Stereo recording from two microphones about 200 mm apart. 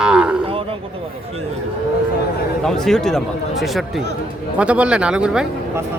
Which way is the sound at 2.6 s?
Centre (ahead or behind).